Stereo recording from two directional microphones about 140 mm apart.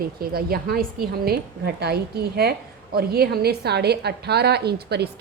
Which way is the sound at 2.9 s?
90° right.